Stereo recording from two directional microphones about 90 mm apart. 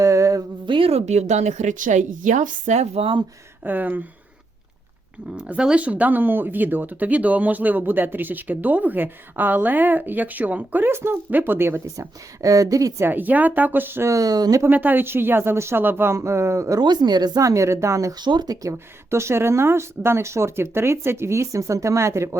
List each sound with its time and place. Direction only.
0.0 s a sound: 35° right (ahead or behind)
0.6 s a sound: 65° right (ahead or behind)
3.0 s speech: 75° right (ahead or behind)
3.6 s speech: 20° right (ahead or behind)
5.3 s speech: 10° right (ahead or behind); by 12.0 s 25° right (ahead or behind)
12.4 s speech: 40° right (ahead or behind)
13.1 s speech: 20° right (ahead or behind)
14.1 s speech: 40° right (ahead or behind)
14.6 s speech: 20° right (ahead or behind)
16.8 s speech: 55° right (ahead or behind); by 18.1 s 35° right (ahead or behind)
18.2 s speech: 55° right (ahead or behind)
18.7 s speech: 30° right (ahead or behind)